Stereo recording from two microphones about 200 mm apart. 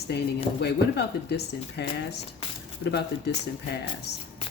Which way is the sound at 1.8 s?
55° left (ahead or behind).